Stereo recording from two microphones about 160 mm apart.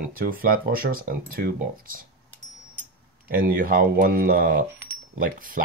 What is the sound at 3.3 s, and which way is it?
Speech, 60° right (ahead or behind).